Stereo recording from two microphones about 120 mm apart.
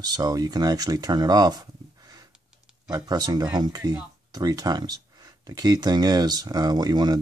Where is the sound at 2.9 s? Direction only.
35° right (ahead or behind).